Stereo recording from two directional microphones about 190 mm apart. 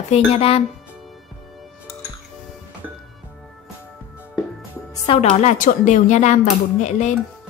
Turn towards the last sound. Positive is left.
turn(degrees=40)  # may be behind; listen again after turning